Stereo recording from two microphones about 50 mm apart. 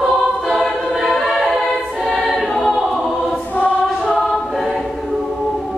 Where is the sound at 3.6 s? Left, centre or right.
Left.